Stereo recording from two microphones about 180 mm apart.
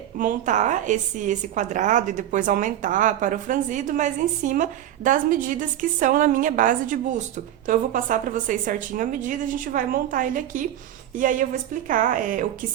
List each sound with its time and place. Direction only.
0.2 s a woman's voice: 45° right (ahead or behind)